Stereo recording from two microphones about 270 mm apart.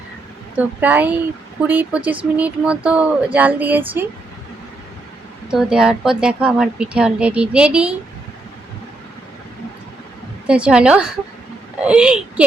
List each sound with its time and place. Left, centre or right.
0.5 s speech: centre
5.5 s speech: centre
10.4 s speech: centre